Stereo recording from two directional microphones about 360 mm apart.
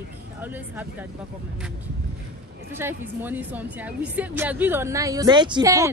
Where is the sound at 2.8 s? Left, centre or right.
Centre.